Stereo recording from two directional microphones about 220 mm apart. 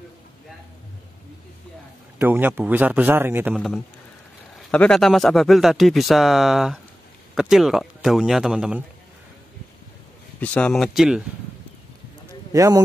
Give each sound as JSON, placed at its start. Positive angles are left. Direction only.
{"t": 2.1, "sound": "speech", "side_deg": -10}
{"t": 3.5, "sound": "speech", "side_deg": 0}
{"t": 10.4, "sound": "speech", "side_deg": 5}
{"t": 12.5, "sound": "speech", "side_deg": -15}